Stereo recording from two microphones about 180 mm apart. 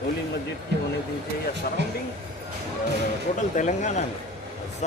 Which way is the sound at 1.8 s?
70° right (ahead or behind).